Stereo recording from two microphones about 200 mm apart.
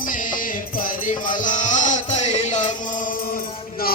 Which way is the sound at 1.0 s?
40° left (ahead or behind).